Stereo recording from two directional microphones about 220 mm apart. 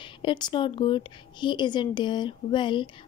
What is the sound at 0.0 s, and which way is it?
Speech, 20° left (ahead or behind).